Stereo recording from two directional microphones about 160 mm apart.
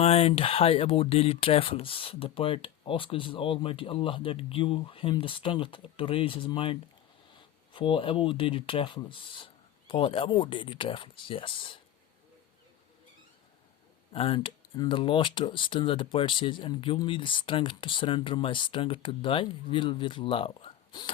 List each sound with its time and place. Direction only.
0.0 s speech: 40° left (ahead or behind)
14.1 s speech: 35° left (ahead or behind)